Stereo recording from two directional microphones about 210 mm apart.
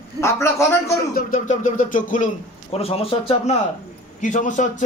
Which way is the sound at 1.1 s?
40° left (ahead or behind).